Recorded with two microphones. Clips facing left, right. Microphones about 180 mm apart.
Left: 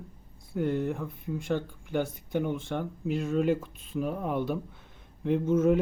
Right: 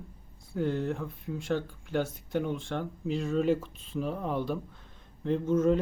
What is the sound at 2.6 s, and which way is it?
Speech, 5° left (ahead or behind).